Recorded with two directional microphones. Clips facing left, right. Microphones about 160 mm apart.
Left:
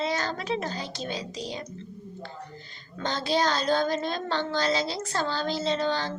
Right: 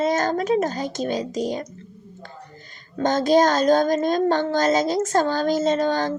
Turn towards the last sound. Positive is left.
turn(degrees=-45)  # may be behind; listen again after turning